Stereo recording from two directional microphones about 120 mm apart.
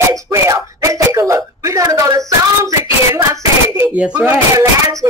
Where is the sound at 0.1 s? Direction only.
25° right (ahead or behind).